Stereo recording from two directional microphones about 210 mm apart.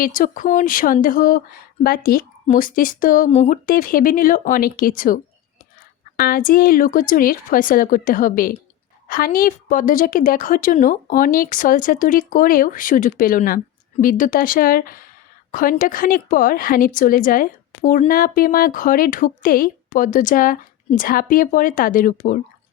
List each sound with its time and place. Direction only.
0.0 s speech: 40° left (ahead or behind)